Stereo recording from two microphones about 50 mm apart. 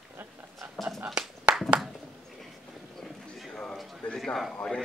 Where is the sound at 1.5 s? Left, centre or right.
Right.